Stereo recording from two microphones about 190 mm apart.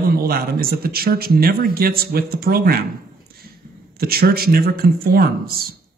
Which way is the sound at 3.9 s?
55° right (ahead or behind).